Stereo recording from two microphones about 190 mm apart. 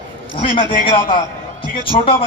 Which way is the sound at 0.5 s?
25° left (ahead or behind).